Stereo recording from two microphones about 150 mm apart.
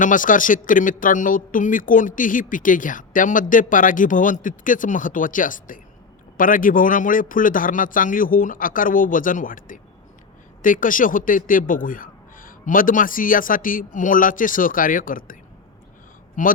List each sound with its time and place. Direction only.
0.0 s speech: 60° left (ahead or behind)
16.4 s speech: 60° left (ahead or behind)